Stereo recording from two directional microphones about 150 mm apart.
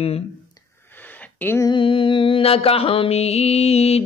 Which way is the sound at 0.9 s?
10° left (ahead or behind).